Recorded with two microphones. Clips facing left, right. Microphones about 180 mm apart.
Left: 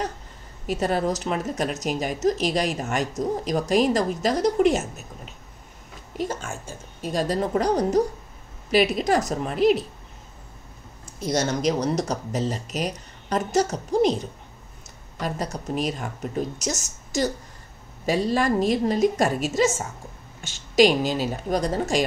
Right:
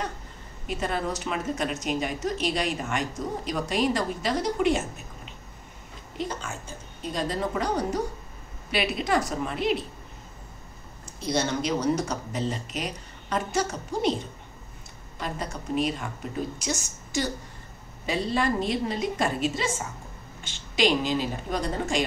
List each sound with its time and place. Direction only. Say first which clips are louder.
0.7 s speech: left 5 dB; 40° left (ahead or behind)
6.1 s a woman's voice: left 4 dB; 50° left (ahead or behind)
11.1 s speech: left 2 dB; 45° left (ahead or behind)
15.2 s a woman's voice: left 4 dB; 40° left (ahead or behind)